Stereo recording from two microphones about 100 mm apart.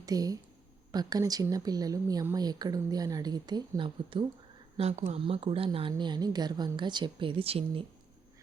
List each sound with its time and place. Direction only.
0.0 s speech: 40° right (ahead or behind); by 4.3 s 55° right (ahead or behind)
4.8 s speech: 90° right; by 5.9 s 65° right (ahead or behind)
6.0 s a woman's voice: 45° right (ahead or behind); by 7.9 s 70° right (ahead or behind)